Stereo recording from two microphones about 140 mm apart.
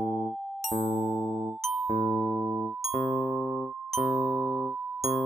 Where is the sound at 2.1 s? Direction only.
40° left (ahead or behind).